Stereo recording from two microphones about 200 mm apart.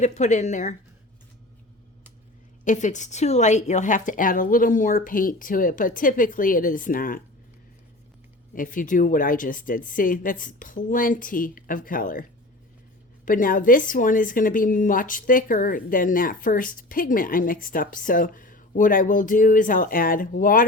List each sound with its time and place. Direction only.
0.0 s speech: 35° left (ahead or behind)
2.6 s a woman's voice: 40° left (ahead or behind)
8.5 s a woman's voice: 40° left (ahead or behind)
13.2 s a woman's voice: 45° left (ahead or behind)